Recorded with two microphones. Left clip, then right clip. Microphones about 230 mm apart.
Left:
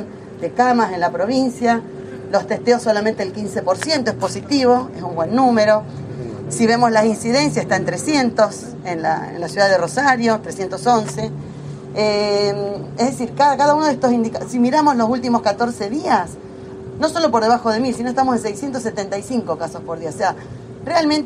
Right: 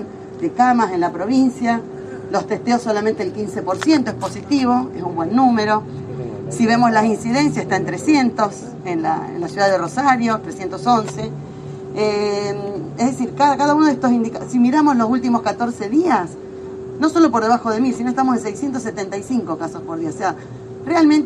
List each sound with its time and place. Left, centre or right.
0.6 s a woman's voice: left
20.8 s a woman's voice: left